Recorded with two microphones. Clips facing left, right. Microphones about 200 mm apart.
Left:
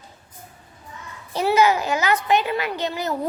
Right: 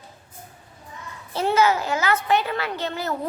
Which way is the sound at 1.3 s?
15° left (ahead or behind).